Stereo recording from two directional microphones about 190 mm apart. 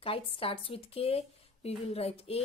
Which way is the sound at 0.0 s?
30° left (ahead or behind).